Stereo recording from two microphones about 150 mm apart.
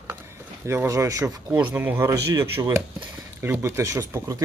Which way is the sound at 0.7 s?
20° right (ahead or behind).